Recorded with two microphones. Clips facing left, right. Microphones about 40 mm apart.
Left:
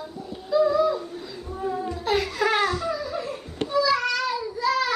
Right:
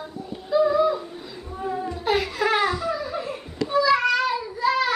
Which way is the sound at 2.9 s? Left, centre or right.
Centre.